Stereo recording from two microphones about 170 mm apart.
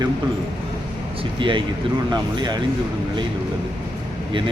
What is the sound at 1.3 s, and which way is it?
Speech, 30° right (ahead or behind).